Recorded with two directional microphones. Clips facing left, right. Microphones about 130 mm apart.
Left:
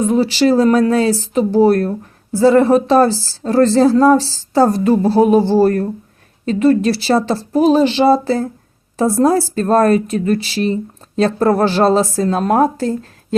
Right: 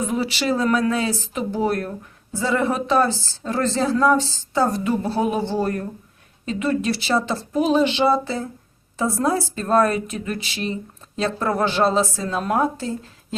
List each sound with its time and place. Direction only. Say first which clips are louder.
0.0 s speech: left 10 dB; 30° left (ahead or behind); by 13.1 s 45° left (ahead or behind)